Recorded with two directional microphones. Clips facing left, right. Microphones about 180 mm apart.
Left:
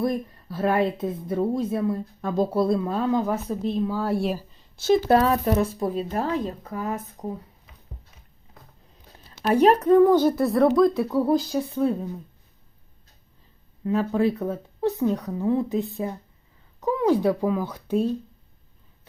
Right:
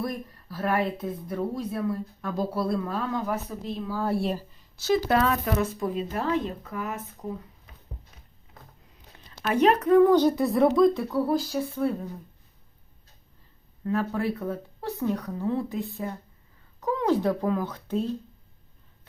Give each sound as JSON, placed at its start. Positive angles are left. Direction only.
{"t": 0.0, "sound": "speech", "side_deg": 25}
{"t": 4.0, "sound": "speech", "side_deg": 0}
{"t": 5.0, "sound": "speech", "side_deg": 35}
{"t": 9.5, "sound": "speech", "side_deg": 35}
{"t": 10.0, "sound": "speech", "side_deg": 10}
{"t": 11.3, "sound": "speech", "side_deg": 20}
{"t": 13.8, "sound": "speech", "side_deg": 20}